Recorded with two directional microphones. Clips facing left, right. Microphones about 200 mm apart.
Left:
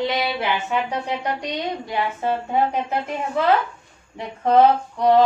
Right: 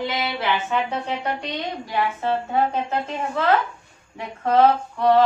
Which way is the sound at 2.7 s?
15° left (ahead or behind).